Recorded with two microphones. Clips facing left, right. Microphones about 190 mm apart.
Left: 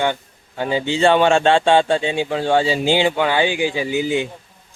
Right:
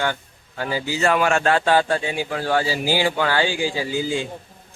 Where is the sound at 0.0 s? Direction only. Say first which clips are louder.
Left 4 dB; 20° left (ahead or behind).